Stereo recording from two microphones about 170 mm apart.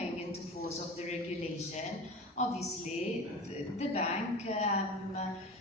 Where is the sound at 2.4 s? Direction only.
45° left (ahead or behind).